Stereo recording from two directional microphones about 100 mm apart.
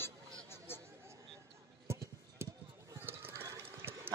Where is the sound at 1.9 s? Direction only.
25° right (ahead or behind).